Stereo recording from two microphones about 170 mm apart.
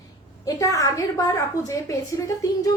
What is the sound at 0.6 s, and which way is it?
A woman's voice, 20° left (ahead or behind).